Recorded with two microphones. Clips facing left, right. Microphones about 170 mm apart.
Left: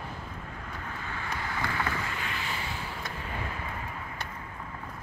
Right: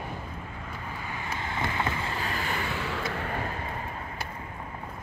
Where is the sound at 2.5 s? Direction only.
65° right (ahead or behind).